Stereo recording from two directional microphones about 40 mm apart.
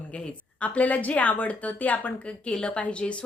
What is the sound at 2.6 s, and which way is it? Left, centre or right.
Speech, left.